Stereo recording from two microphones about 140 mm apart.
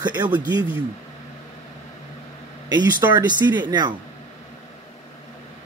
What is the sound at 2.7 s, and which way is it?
A man's voice, 30° right (ahead or behind).